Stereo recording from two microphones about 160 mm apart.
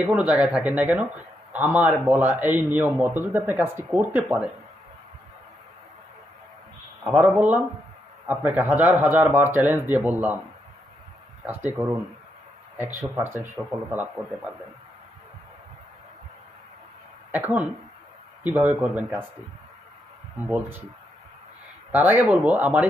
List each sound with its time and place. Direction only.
0.1 s a man's voice: 5° right (ahead or behind)
7.1 s a man's voice: 10° right (ahead or behind)
11.4 s a man's voice: 10° right (ahead or behind)
17.3 s a man's voice: 10° right (ahead or behind)
20.5 s a man's voice: 15° right (ahead or behind)
21.9 s a man's voice: 10° right (ahead or behind)